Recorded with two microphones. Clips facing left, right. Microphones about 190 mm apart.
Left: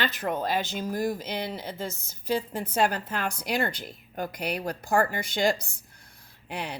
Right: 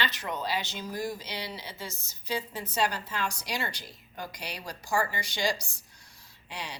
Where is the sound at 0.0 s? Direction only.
50° left (ahead or behind).